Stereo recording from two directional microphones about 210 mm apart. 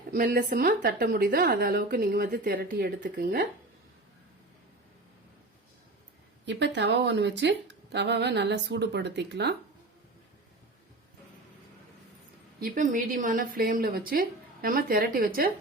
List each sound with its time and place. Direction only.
0.1 s speech: 45° right (ahead or behind)
6.4 s speech: 55° right (ahead or behind)
12.5 s speech: 40° right (ahead or behind)